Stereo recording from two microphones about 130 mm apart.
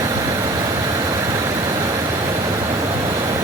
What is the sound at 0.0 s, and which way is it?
Vehicle, 25° right (ahead or behind).